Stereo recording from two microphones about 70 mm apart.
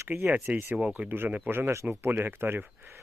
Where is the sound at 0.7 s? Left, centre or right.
Centre.